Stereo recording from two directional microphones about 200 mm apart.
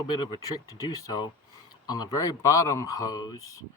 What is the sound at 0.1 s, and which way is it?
A man's voice, 20° left (ahead or behind).